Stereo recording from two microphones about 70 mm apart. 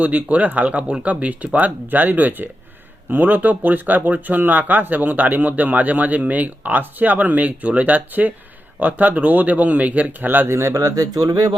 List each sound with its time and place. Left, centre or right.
0.0 s speech: right